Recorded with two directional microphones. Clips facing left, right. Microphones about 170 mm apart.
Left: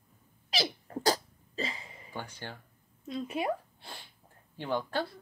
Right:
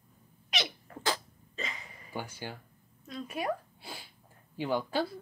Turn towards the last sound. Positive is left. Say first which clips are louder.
# right 2 dB
turn(degrees=-10)  # may be behind; listen again after turning